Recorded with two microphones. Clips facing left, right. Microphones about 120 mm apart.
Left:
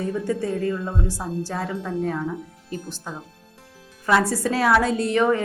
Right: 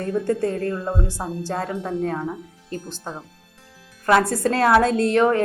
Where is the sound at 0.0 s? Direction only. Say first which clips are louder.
Right 3 dB; 55° right (ahead or behind).